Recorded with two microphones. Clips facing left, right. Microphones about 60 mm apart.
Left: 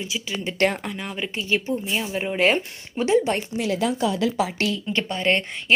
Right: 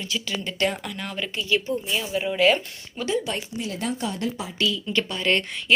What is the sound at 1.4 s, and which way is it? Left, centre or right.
Speech, left.